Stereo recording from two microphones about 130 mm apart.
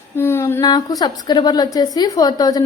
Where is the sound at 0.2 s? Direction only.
20° left (ahead or behind).